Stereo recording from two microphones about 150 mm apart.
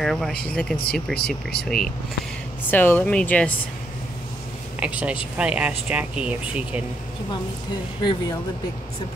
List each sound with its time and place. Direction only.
0.0 s speech: 5° left (ahead or behind)
4.7 s a woman's voice: 10° right (ahead or behind)
8.0 s speech: 30° left (ahead or behind)